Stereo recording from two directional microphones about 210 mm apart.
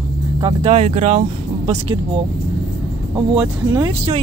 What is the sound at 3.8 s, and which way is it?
Speech, 30° right (ahead or behind).